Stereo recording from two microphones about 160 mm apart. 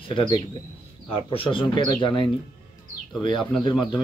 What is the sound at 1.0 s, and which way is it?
Speech, 35° left (ahead or behind).